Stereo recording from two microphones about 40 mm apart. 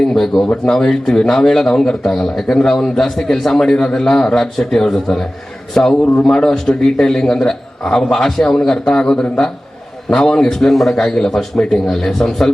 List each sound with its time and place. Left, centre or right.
0.0 s speech: centre
0.4 s speech: left
0.8 s a man's voice: centre